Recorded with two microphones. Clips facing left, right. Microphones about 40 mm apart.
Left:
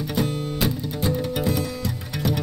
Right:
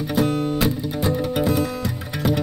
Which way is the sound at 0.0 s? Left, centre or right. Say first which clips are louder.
Right 5 dB; centre.